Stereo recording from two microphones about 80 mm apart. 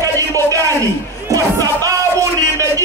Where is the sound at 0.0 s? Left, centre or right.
Right.